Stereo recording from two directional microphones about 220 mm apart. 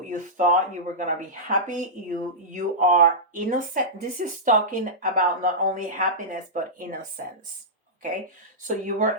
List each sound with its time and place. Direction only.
0.1 s speech: 35° right (ahead or behind)
8.6 s speech: 35° right (ahead or behind)